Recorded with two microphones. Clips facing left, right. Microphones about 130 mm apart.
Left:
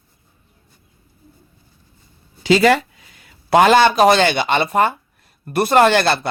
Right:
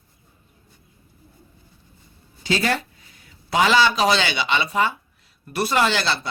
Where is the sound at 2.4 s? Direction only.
90° left.